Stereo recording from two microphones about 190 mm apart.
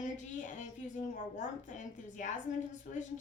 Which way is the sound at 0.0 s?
40° left (ahead or behind).